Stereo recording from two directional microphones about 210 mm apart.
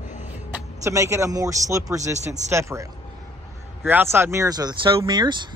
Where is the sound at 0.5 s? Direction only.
15° right (ahead or behind).